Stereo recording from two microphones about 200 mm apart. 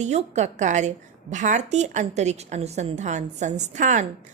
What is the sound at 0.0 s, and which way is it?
A woman's voice, 35° right (ahead or behind).